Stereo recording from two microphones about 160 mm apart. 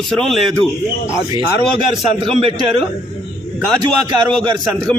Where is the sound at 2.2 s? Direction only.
35° right (ahead or behind).